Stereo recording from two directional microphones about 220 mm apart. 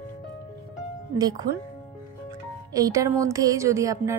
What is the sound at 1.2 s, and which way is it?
Speech, 15° right (ahead or behind).